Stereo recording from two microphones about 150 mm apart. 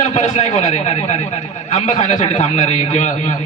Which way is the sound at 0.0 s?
50° left (ahead or behind).